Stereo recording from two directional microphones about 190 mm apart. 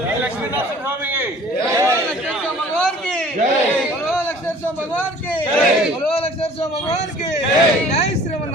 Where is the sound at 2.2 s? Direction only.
5° left (ahead or behind).